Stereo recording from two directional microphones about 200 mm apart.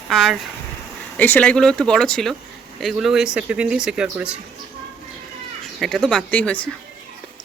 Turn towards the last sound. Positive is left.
turn(degrees=5)  # may be behind; listen again after turning